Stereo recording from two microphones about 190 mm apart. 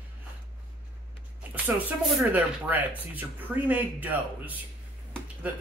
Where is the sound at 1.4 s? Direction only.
10° right (ahead or behind).